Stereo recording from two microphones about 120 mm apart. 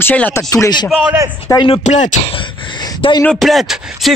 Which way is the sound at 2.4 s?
40° left (ahead or behind).